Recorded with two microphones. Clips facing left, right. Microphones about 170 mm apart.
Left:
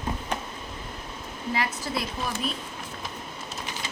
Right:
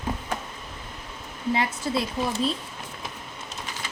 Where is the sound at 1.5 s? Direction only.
25° right (ahead or behind).